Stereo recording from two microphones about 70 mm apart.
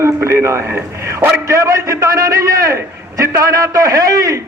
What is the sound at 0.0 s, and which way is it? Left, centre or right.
A man's voice, right.